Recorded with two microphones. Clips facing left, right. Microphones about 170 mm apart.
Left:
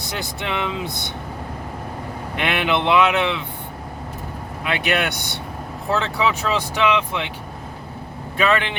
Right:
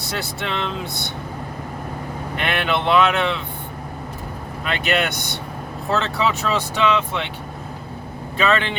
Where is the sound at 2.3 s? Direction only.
15° left (ahead or behind).